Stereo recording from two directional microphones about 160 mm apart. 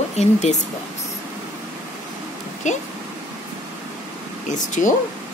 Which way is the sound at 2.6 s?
50° left (ahead or behind).